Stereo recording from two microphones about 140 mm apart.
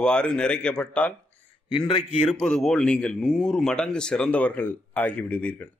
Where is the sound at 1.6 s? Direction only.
35° left (ahead or behind).